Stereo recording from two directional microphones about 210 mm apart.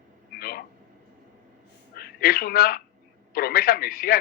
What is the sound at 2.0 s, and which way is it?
A man's voice, 45° left (ahead or behind).